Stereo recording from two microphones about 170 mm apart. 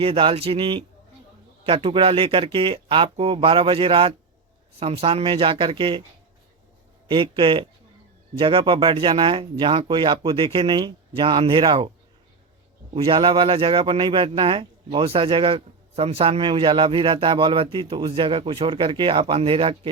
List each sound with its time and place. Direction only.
0.0 s speech: 30° right (ahead or behind)
7.1 s speech: 30° right (ahead or behind)
12.9 s speech: 30° right (ahead or behind)